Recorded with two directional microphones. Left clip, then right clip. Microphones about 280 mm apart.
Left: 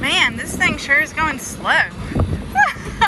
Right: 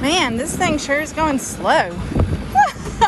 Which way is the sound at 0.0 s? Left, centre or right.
Centre.